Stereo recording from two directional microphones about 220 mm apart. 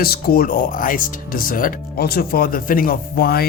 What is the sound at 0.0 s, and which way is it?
Speech, 45° left (ahead or behind).